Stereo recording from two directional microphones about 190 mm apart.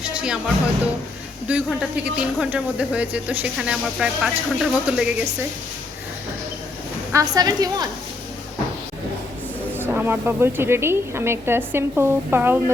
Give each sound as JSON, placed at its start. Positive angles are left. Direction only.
{"t": 0.0, "sound": "speech", "side_deg": -5}
{"t": 7.1, "sound": "a woman's voice", "side_deg": -20}
{"t": 9.7, "sound": "speech", "side_deg": -10}